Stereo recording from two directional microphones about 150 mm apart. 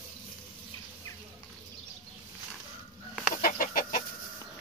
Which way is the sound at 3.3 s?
70° left (ahead or behind).